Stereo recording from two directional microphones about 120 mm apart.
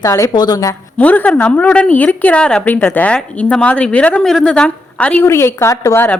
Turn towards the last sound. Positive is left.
turn(degrees=20)  # may be behind; listen again after turning